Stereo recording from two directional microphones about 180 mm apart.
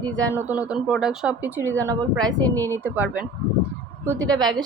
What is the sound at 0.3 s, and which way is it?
A woman's voice, 10° right (ahead or behind).